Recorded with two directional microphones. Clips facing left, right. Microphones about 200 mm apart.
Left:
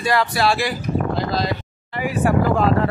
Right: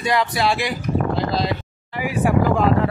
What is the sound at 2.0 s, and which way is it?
Speech, 10° right (ahead or behind).